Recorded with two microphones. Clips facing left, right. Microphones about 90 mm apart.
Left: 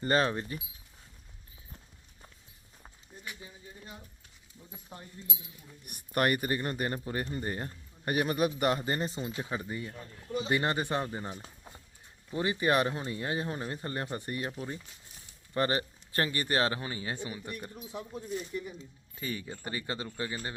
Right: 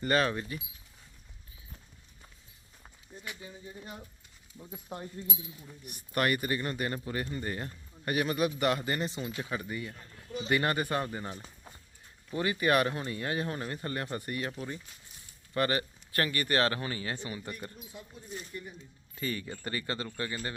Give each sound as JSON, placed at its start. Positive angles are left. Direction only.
{"t": 0.0, "sound": "speech", "side_deg": 30}
{"t": 5.8, "sound": "speech", "side_deg": 55}
{"t": 15.5, "sound": "speech", "side_deg": 25}
{"t": 17.7, "sound": "speech", "side_deg": 85}
{"t": 19.1, "sound": "speech", "side_deg": 10}